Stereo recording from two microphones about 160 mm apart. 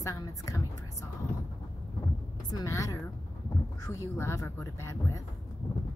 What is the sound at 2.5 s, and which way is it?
A woman's voice, 20° left (ahead or behind).